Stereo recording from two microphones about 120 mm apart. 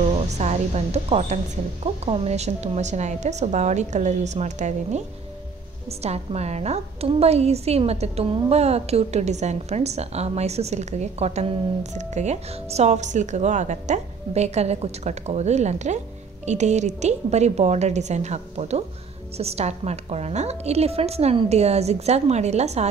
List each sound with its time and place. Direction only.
0.1 s a woman's voice: 65° right (ahead or behind)
5.9 s a woman's voice: 60° right (ahead or behind)